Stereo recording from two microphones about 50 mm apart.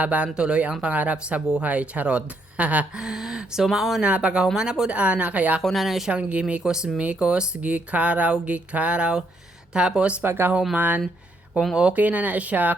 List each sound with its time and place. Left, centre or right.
0.0 s speech: right
2.9 s speech: centre
4.0 s speech: right
4.9 s speech: right
5.6 s speech: centre
6.1 s speech: right
10.2 s speech: right
10.8 s speech: right
11.7 s speech: centre
11.9 s speech: right